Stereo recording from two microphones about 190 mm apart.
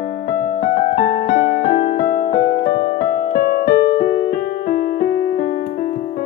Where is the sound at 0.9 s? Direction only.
45° left (ahead or behind).